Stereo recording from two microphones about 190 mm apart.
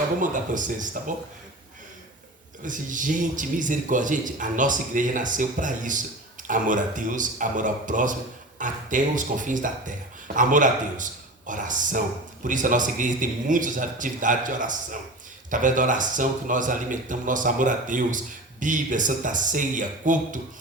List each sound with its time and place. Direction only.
0.2 s speech: 45° right (ahead or behind)
2.6 s speech: 45° right (ahead or behind)